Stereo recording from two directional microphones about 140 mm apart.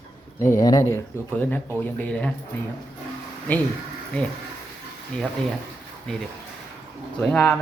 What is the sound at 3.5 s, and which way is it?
Speech, 10° left (ahead or behind).